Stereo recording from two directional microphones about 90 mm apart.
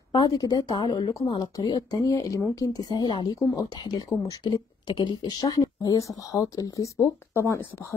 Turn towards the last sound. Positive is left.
turn(degrees=30)  # may be behind; listen again after turning